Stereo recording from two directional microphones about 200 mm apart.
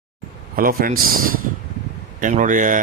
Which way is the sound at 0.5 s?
45° right (ahead or behind).